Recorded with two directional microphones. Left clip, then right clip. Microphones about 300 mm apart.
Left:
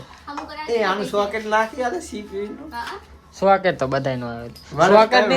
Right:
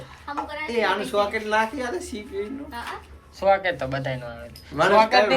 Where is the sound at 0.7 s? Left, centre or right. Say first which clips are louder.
Left 3 dB; left.